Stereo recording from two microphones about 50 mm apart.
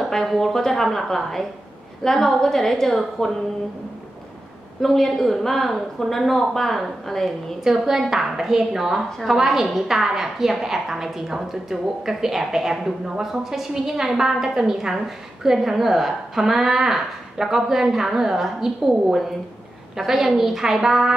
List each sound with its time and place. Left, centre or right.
0.0 s a woman's voice: centre
4.8 s a woman's voice: centre
7.6 s a woman's voice: centre
20.0 s a woman's voice: centre